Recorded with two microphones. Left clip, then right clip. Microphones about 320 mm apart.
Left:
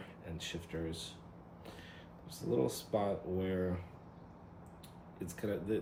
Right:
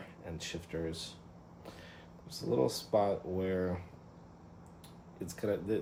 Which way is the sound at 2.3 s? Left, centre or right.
Right.